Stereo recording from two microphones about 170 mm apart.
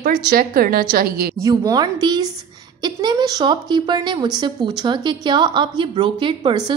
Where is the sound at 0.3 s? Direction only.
60° right (ahead or behind).